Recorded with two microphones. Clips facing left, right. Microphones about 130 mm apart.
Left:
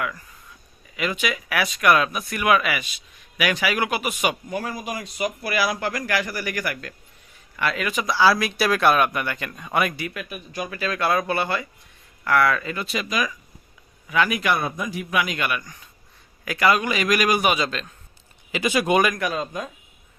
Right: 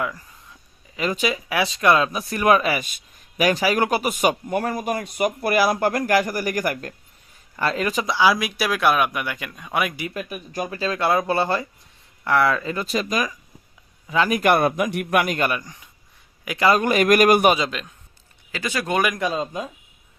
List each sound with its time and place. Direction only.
0.9 s speech: 35° right (ahead or behind)
8.1 s speech: 15° right (ahead or behind)
10.2 s speech: 35° right (ahead or behind)
10.8 s speech: 25° right (ahead or behind)
12.8 s speech: 40° right (ahead or behind); by 16.7 s 20° right (ahead or behind)
16.7 s speech: 50° right (ahead or behind)
17.7 s speech: 15° right (ahead or behind)
18.5 s speech: 15° left (ahead or behind)
19.1 s speech: 25° right (ahead or behind)